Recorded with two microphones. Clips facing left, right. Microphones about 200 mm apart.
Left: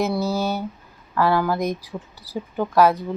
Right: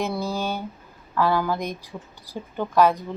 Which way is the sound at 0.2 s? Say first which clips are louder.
Left 4 dB; 40° left (ahead or behind).